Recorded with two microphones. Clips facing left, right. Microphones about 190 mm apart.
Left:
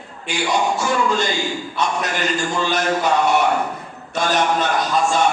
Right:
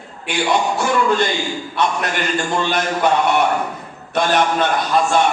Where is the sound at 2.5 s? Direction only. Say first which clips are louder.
Even; 60° right (ahead or behind).